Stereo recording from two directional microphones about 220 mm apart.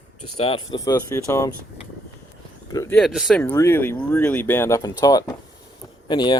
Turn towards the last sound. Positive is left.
turn(degrees=20)  # may be behind; listen again after turning